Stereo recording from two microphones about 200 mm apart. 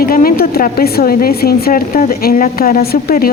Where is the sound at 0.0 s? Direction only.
45° left (ahead or behind).